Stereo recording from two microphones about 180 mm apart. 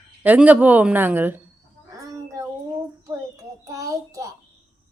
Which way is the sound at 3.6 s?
20° right (ahead or behind).